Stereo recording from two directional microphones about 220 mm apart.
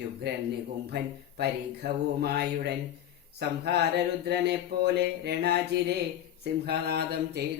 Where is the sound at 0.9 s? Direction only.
50° right (ahead or behind).